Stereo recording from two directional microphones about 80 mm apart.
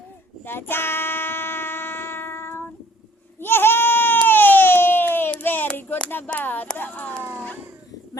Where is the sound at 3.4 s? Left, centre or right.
Left.